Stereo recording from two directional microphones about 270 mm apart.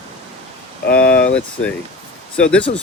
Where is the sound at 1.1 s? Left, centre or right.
Left.